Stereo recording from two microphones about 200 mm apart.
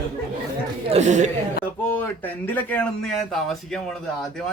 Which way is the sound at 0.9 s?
35° right (ahead or behind).